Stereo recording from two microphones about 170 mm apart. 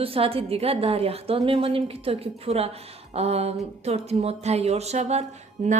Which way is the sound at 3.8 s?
40° right (ahead or behind).